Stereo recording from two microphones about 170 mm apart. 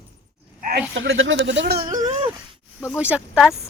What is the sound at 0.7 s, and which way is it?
Speech, 90° right.